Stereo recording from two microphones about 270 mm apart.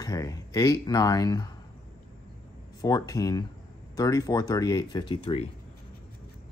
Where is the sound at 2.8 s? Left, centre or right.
Centre.